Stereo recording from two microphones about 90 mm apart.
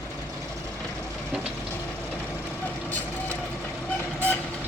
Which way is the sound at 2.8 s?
20° left (ahead or behind).